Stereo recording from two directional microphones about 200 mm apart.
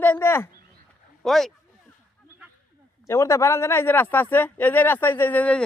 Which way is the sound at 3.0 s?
15° left (ahead or behind).